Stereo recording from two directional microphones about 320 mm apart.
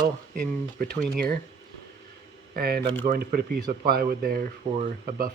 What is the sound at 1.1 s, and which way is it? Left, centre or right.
Speech, right.